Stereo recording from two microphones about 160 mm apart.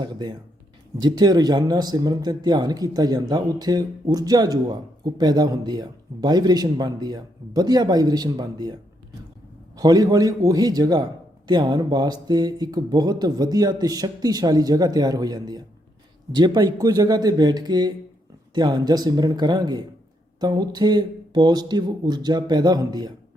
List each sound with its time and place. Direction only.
0.0 s speech: 25° right (ahead or behind)